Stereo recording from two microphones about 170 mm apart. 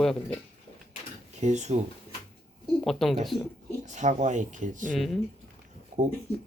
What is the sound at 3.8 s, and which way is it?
Speech, 45° right (ahead or behind).